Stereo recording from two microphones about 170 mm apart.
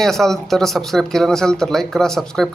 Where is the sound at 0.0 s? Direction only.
Centre (ahead or behind).